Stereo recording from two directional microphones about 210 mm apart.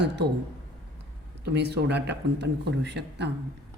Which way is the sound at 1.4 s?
50° right (ahead or behind).